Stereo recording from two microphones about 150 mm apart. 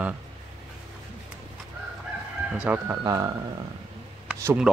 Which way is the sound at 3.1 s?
25° right (ahead or behind).